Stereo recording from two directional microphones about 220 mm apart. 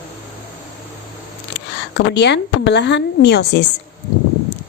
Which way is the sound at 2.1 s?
50° left (ahead or behind).